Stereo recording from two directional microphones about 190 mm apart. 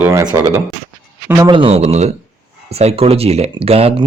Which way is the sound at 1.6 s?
30° right (ahead or behind).